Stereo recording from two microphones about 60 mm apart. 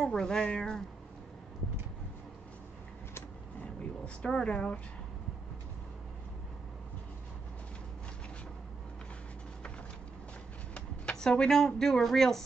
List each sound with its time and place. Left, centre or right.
0.0 s speech: centre
3.6 s speech: centre
10.7 s speech: centre